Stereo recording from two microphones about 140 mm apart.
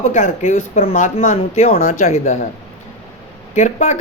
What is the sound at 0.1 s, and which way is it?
Speech, 55° left (ahead or behind).